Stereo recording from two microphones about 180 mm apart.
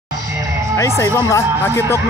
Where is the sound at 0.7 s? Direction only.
15° left (ahead or behind).